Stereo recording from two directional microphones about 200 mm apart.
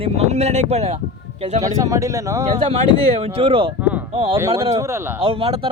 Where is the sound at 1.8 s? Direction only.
15° right (ahead or behind).